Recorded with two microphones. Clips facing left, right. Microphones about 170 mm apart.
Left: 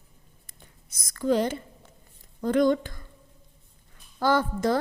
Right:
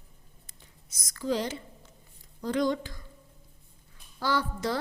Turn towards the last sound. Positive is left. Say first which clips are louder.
# left 6 dB
turn(degrees=50)  # may be behind; listen again after turning